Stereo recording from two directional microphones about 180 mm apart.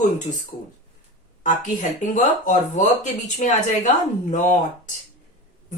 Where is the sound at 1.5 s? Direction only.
45° left (ahead or behind).